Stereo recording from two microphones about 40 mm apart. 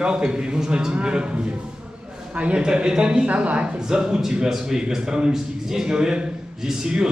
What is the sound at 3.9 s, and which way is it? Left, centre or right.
A man's voice, centre.